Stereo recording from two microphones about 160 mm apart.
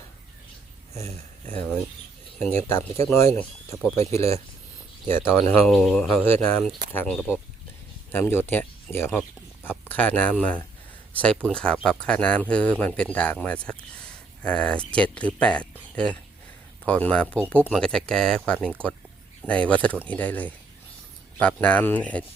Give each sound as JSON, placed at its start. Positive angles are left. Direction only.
{"t": 0.9, "sound": "speech", "side_deg": 15}
{"t": 5.6, "sound": "speech", "side_deg": 0}
{"t": 16.8, "sound": "speech", "side_deg": 10}